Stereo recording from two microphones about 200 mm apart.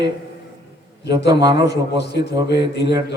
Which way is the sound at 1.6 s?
55° left (ahead or behind).